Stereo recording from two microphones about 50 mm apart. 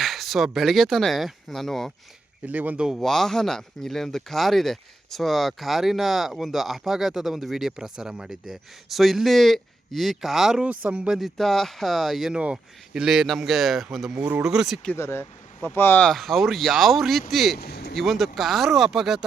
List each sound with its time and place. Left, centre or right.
0.0 s speech: centre
2.5 s speech: right
3.0 s speech: centre
10.6 s speech: right
11.2 s speech: centre
12.3 s speech: right
12.9 s a man's voice: centre
14.9 s speech: left
16.1 s speech: centre